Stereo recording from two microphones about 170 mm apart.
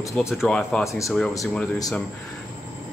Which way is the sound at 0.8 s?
15° left (ahead or behind).